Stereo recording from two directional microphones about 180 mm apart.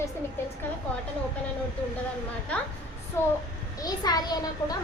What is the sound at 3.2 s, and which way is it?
A woman's voice, 15° left (ahead or behind).